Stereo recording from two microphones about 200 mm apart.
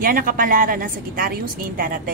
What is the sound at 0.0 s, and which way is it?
A woman's voice, 45° right (ahead or behind).